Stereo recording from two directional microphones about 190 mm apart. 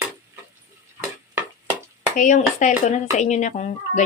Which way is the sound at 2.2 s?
40° left (ahead or behind).